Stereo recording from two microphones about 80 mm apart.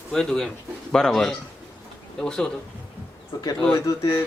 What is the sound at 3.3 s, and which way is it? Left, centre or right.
Speech, left.